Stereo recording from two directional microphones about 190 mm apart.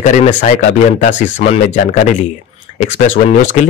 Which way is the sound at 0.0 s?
40° left (ahead or behind).